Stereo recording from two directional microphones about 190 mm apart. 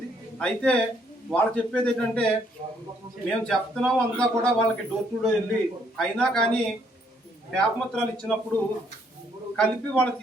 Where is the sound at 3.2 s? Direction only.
5° left (ahead or behind).